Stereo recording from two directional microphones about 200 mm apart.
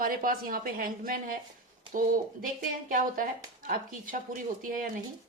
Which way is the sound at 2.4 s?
45° right (ahead or behind).